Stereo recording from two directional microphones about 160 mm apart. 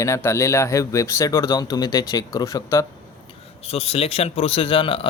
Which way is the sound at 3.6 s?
40° left (ahead or behind).